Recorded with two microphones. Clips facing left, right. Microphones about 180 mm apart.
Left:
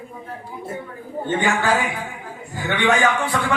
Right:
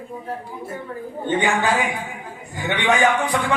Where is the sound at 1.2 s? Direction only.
20° right (ahead or behind).